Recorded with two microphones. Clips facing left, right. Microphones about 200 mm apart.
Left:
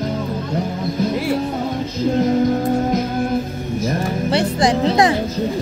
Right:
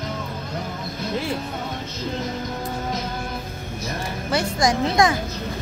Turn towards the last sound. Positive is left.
turn(degrees=35)  # may be behind; listen again after turning